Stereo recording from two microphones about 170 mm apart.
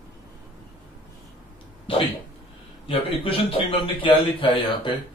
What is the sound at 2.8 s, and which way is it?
A man's voice, 30° left (ahead or behind).